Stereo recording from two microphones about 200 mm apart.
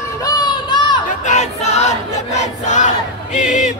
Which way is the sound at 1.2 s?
35° left (ahead or behind).